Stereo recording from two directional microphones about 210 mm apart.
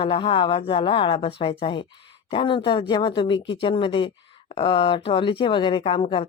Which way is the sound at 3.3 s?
60° left (ahead or behind).